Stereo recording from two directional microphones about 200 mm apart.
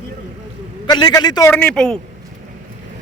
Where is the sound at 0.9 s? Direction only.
20° left (ahead or behind); by 2.0 s 5° left (ahead or behind).